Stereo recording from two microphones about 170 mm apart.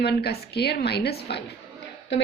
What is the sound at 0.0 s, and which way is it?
A woman's voice, 75° left (ahead or behind).